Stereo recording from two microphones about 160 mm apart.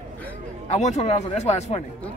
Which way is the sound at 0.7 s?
45° left (ahead or behind).